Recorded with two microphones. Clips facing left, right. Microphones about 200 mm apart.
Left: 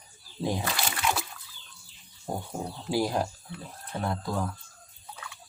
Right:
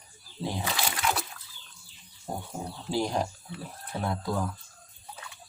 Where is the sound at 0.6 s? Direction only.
Centre (ahead or behind).